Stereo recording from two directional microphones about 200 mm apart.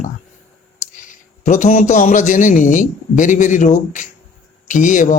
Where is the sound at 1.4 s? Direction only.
40° left (ahead or behind).